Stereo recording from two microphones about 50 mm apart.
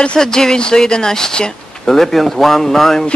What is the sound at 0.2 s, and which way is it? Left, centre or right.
A man's voice, centre.